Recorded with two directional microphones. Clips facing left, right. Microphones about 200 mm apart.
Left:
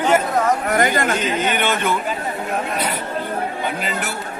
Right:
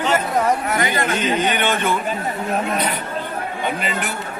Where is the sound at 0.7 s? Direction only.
50° left (ahead or behind).